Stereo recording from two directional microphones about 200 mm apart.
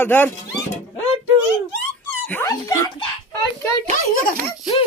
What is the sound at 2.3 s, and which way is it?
Speech, 15° left (ahead or behind).